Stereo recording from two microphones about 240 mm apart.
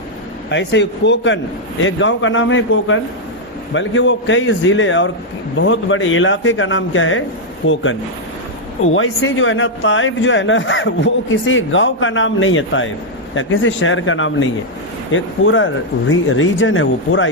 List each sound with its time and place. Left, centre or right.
0.5 s a man's voice: left
9.0 s a man's voice: left